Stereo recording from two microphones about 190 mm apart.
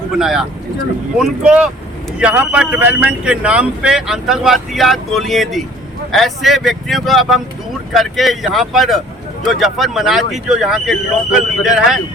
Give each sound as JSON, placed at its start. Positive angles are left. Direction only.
{"t": 0.2, "sound": "speech", "side_deg": 0}